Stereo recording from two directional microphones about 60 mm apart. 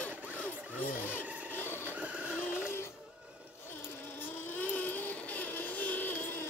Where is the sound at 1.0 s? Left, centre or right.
Left.